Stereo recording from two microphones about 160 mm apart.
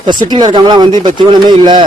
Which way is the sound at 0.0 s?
30° right (ahead or behind).